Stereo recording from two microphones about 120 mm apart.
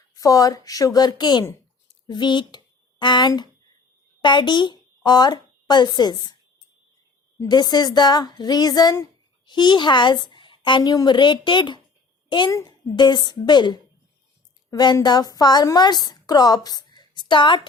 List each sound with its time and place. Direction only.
0.1 s a woman's voice: 30° left (ahead or behind)
7.3 s a woman's voice: 35° left (ahead or behind)